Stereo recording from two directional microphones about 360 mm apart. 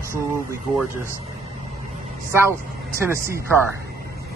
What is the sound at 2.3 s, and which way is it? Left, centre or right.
A man's voice, centre.